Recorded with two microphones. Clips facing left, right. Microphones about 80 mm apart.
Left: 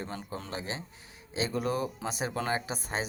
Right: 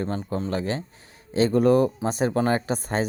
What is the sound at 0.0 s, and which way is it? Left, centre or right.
Speech, right.